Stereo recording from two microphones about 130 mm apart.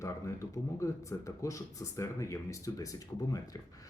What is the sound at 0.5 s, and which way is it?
Speech, 25° left (ahead or behind).